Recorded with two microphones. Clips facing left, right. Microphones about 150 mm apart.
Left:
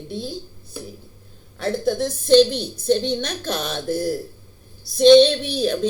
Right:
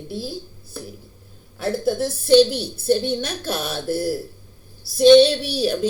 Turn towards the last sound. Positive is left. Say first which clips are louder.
# even
turn(degrees=-10)  # may be behind; listen again after turning